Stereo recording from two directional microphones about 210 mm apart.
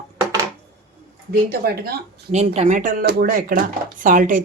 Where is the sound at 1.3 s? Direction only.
50° right (ahead or behind).